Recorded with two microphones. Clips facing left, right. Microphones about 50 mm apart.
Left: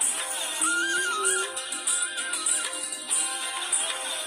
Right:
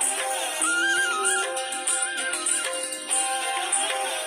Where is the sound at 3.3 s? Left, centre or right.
Right.